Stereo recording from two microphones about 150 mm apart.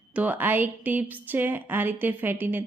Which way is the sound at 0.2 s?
10° right (ahead or behind).